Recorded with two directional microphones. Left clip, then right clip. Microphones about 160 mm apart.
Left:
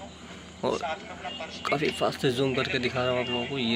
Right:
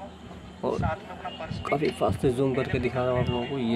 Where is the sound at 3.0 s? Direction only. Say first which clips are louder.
Even; 10° right (ahead or behind).